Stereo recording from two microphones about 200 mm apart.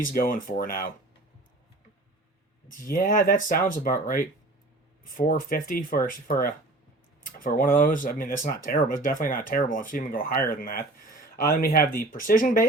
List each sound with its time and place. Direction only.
0.0 s speech: 45° left (ahead or behind)
2.7 s speech: 45° left (ahead or behind)